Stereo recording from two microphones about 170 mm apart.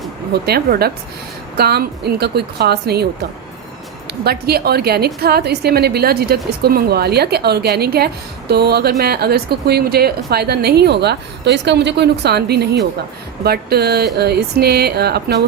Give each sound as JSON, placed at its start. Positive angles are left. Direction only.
{"t": 0.4, "sound": "a woman's voice", "side_deg": -70}